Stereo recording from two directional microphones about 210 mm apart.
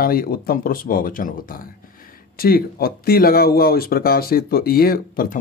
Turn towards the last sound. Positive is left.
turn(degrees=45)  # may be behind; listen again after turning